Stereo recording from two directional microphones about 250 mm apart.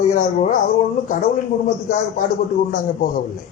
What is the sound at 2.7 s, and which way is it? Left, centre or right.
Speech, left.